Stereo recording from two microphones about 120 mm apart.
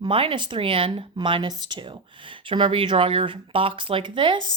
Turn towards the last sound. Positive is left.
turn(degrees=-45)  # may be behind; listen again after turning